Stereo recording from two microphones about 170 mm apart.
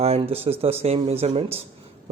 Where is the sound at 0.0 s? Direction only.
35° right (ahead or behind).